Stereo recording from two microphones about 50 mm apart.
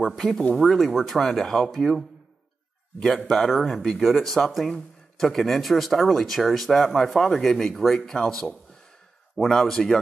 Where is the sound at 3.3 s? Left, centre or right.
Centre.